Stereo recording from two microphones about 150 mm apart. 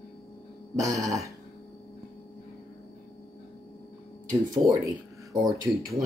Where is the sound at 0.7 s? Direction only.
20° right (ahead or behind).